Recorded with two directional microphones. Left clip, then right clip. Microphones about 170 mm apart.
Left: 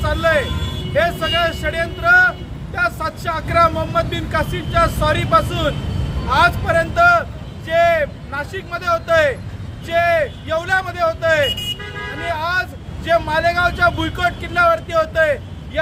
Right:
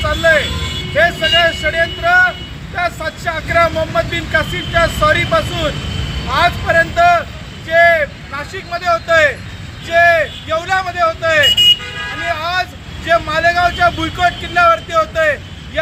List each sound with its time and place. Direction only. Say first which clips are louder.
0.2 s speech: right 5 dB; 25° left (ahead or behind)